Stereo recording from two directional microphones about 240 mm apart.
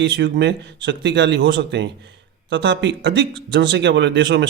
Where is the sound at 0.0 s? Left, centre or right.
Right.